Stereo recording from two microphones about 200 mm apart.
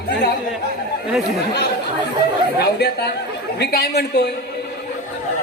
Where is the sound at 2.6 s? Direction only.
55° left (ahead or behind).